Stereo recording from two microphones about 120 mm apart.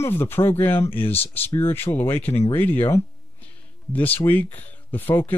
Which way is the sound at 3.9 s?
15° left (ahead or behind).